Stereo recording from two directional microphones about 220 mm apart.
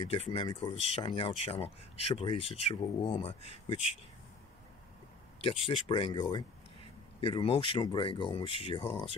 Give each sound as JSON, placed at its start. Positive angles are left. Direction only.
{"t": 0.0, "sound": "speech", "side_deg": 25}
{"t": 5.4, "sound": "speech", "side_deg": 25}